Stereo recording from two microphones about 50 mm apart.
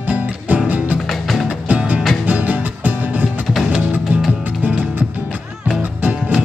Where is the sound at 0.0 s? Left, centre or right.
Right.